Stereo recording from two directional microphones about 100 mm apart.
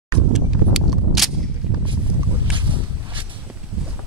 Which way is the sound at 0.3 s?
Centre (ahead or behind).